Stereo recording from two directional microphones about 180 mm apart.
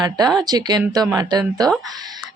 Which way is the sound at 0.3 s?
20° right (ahead or behind).